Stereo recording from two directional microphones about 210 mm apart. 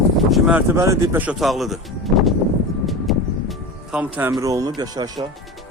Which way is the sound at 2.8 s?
Centre (ahead or behind).